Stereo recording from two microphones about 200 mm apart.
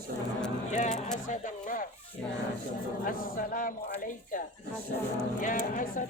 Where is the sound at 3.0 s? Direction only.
45° left (ahead or behind).